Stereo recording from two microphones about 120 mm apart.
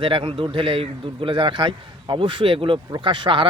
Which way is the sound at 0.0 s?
45° right (ahead or behind).